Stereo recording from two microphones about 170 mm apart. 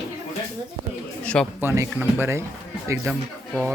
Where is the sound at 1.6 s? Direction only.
15° right (ahead or behind).